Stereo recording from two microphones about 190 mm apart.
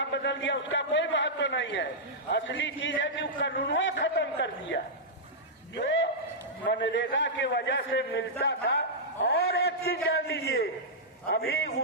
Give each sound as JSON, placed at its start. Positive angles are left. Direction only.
{"t": 0.0, "sound": "a man's voice", "side_deg": 65}
{"t": 5.7, "sound": "a sound", "side_deg": 75}
{"t": 6.7, "sound": "a man's voice", "side_deg": 70}